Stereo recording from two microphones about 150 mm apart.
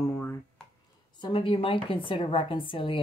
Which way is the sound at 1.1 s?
35° left (ahead or behind).